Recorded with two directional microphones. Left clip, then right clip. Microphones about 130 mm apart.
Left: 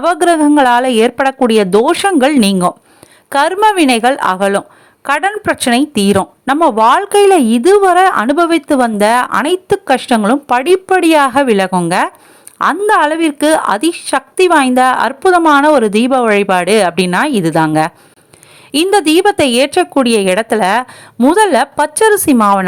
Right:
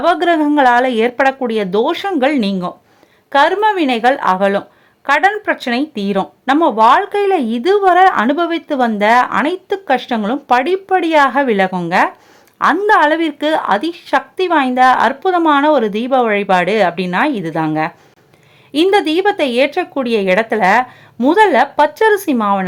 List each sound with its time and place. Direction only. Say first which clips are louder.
0.0 s speech: left 2 dB; 35° left (ahead or behind)
5.0 s speech: even; 30° left (ahead or behind)
5.5 s speech: left 6 dB; 55° left (ahead or behind)
12.9 s speech: left 1 dB; 30° left (ahead or behind); by 17.9 s 45° left (ahead or behind)
18.7 s speech: left 2 dB; 35° left (ahead or behind)